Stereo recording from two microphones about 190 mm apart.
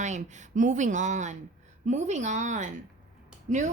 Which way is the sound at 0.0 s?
40° right (ahead or behind).